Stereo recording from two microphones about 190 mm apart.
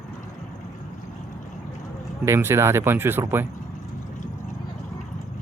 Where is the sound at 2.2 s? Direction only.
15° right (ahead or behind).